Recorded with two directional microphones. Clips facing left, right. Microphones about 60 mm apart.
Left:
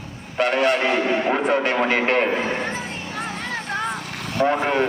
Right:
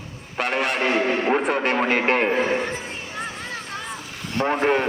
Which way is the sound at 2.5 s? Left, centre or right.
Left.